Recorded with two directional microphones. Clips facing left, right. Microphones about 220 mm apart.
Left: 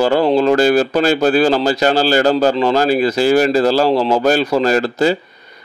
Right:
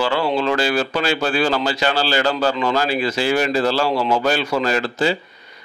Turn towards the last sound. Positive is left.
turn(degrees=45)  # may be behind; listen again after turning